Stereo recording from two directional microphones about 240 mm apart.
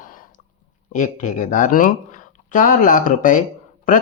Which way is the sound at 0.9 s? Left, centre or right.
Left.